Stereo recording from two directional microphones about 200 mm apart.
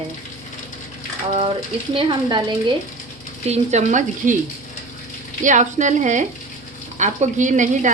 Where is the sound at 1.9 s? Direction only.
25° right (ahead or behind).